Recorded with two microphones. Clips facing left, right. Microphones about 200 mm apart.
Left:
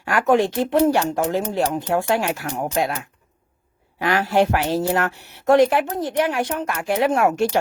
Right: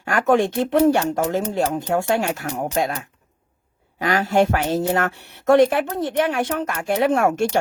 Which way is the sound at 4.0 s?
45° right (ahead or behind).